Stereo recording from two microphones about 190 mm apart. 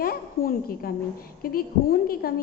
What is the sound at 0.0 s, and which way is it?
A woman's voice, 50° left (ahead or behind).